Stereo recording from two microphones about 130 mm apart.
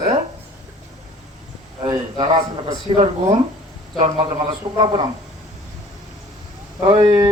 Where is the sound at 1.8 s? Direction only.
35° right (ahead or behind).